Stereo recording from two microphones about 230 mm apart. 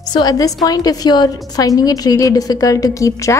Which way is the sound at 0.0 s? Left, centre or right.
Centre.